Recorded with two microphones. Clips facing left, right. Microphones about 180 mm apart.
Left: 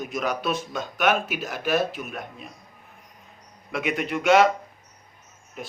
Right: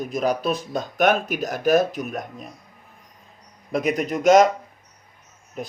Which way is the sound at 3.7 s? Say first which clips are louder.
Right 4 dB; 40° right (ahead or behind).